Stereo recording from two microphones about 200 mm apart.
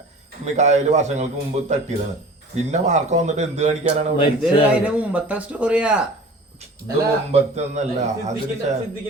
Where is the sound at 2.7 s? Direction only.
35° right (ahead or behind).